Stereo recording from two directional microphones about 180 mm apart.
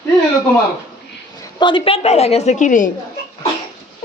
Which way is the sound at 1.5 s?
25° left (ahead or behind).